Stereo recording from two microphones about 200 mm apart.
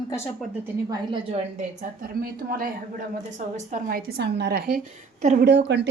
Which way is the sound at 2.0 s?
45° right (ahead or behind).